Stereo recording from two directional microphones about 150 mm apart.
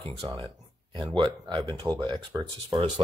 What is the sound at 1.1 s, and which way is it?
Speech, 35° right (ahead or behind).